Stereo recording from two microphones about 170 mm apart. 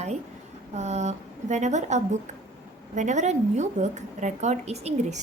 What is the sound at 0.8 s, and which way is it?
A woman's voice, 40° right (ahead or behind).